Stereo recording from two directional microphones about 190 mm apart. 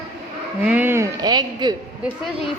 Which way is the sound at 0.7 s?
10° right (ahead or behind).